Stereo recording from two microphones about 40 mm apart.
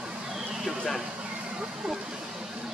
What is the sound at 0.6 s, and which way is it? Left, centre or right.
Speech, centre.